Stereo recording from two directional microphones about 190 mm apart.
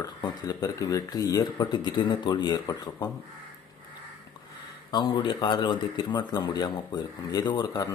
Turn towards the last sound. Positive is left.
turn(degrees=20)  # may be behind; listen again after turning